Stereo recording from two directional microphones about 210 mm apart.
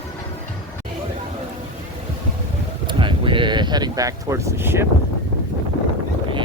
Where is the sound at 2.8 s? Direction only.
25° right (ahead or behind).